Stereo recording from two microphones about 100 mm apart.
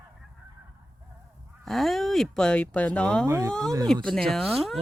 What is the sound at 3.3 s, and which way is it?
Speech, 30° right (ahead or behind).